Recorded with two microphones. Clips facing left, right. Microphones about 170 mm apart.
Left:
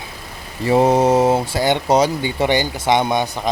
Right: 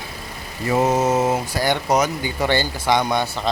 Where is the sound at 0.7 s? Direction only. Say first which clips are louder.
Left 4 dB; 30° left (ahead or behind).